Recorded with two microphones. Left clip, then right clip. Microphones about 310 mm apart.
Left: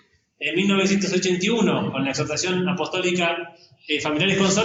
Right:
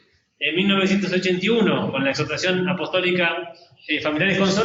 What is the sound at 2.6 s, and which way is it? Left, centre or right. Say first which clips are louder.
A man's voice: right 2 dB; centre.